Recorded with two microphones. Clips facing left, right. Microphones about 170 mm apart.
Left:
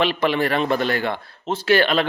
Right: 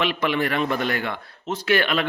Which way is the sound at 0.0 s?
30° left (ahead or behind).